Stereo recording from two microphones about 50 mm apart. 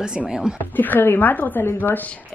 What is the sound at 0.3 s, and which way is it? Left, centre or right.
Speech, centre.